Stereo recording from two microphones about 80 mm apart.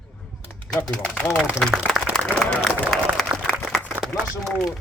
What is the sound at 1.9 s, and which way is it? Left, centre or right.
Speech, centre.